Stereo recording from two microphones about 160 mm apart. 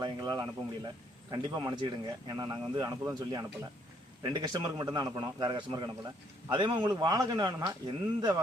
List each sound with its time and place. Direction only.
0.0 s a man's voice: 25° right (ahead or behind)